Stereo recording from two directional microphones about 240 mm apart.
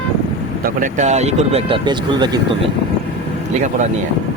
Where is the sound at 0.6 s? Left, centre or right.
Right.